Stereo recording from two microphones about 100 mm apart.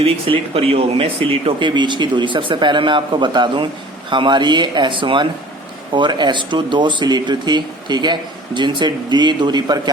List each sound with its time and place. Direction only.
0.0 s speech: 75° right (ahead or behind); by 9.9 s 45° right (ahead or behind)